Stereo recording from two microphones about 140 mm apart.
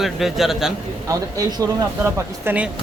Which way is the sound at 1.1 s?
25° right (ahead or behind).